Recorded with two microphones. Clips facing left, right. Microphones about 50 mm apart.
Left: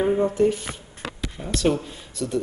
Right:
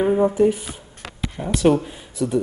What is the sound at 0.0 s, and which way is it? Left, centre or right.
Speech, centre.